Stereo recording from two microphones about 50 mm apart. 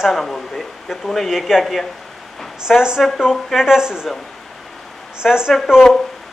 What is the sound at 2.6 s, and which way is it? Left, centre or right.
A woman's voice, centre.